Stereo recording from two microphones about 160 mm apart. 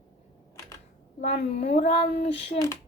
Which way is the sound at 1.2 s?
45° left (ahead or behind).